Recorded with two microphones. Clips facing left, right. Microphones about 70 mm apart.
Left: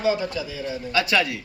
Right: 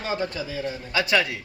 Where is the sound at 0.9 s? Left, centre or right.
Right.